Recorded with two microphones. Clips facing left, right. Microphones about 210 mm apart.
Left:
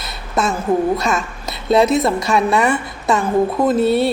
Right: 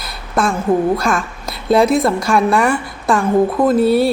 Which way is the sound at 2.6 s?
20° left (ahead or behind).